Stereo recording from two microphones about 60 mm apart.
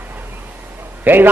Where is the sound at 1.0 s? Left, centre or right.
Right.